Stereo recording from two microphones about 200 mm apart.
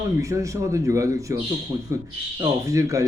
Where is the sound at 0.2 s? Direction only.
15° right (ahead or behind).